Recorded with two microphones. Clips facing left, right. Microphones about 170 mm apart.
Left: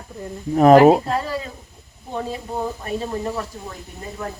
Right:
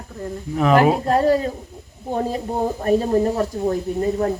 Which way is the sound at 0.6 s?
40° left (ahead or behind).